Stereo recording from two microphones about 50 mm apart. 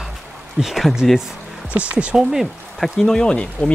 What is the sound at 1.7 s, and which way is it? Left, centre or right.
Speech, right.